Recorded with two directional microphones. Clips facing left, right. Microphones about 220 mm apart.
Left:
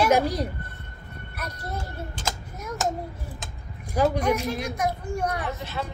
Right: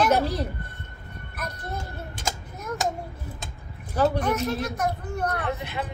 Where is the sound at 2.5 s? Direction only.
10° left (ahead or behind).